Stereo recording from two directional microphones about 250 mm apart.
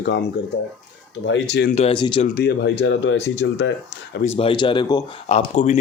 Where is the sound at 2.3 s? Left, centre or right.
Left.